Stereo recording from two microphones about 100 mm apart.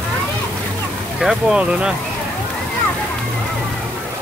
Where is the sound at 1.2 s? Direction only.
10° right (ahead or behind).